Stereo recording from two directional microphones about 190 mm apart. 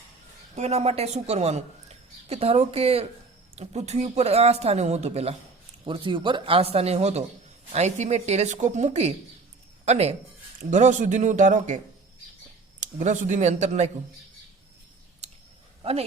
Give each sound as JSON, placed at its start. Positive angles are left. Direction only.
{"t": 0.5, "sound": "a woman's voice", "side_deg": -35}
{"t": 12.8, "sound": "a woman's voice", "side_deg": -40}
{"t": 15.2, "sound": "a sound", "side_deg": -35}
{"t": 15.8, "sound": "speech", "side_deg": -30}